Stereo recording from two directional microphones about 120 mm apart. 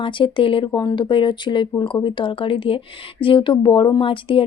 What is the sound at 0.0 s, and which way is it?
Speech, 45° left (ahead or behind).